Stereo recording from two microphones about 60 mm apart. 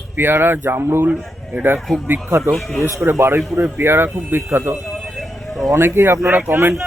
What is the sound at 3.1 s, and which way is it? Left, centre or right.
Speech, right.